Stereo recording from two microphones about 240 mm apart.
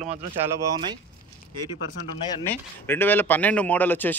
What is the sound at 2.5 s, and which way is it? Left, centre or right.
Speech, centre.